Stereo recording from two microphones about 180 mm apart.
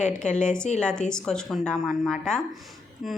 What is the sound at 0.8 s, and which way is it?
A woman's voice, 5° left (ahead or behind).